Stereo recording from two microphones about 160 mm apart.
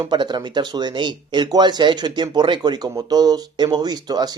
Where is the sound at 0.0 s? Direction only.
25° right (ahead or behind).